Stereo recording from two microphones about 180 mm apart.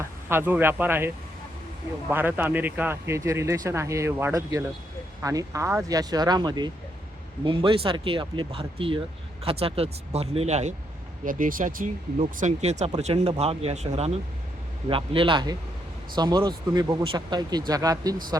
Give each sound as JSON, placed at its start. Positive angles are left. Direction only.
{"t": 0.0, "sound": "a man's voice", "side_deg": -15}
{"t": 11.3, "sound": "speech", "side_deg": -50}